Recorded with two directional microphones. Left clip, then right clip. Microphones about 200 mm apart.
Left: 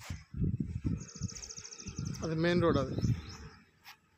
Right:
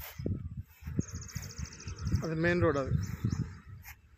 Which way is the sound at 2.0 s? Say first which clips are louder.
Right 1 dB; centre (ahead or behind).